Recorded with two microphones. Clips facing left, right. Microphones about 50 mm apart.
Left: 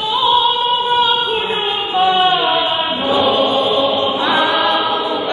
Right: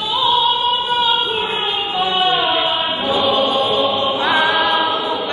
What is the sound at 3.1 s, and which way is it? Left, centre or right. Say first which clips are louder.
Choir: left 2 dB; left.